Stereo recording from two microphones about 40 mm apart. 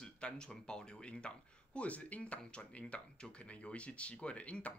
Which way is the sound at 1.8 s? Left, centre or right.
Left.